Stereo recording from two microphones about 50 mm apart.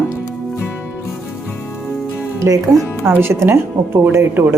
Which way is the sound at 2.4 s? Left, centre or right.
Right.